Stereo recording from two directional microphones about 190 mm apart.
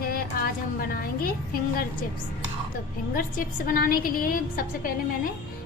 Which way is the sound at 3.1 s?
45° left (ahead or behind).